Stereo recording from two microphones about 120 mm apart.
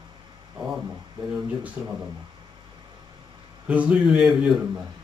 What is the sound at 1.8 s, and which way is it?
Speech, 15° right (ahead or behind).